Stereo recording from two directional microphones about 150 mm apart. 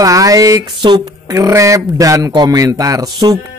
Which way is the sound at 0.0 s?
25° right (ahead or behind).